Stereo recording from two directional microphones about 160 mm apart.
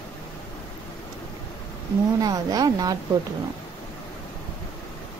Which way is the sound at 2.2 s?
25° right (ahead or behind).